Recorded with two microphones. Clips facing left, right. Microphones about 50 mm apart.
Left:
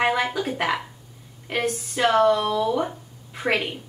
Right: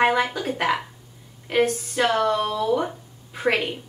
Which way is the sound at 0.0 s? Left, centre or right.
Centre.